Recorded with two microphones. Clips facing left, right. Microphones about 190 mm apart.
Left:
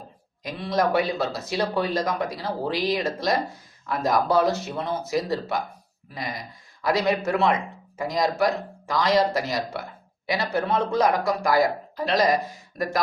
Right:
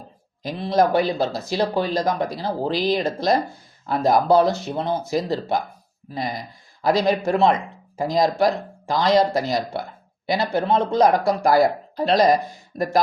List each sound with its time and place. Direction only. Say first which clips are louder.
0.4 s a man's voice: right 4 dB; 30° right (ahead or behind)
6.8 s a man's voice: right 4 dB; 30° right (ahead or behind)